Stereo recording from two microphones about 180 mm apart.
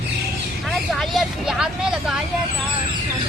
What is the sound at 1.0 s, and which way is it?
Speech, centre (ahead or behind).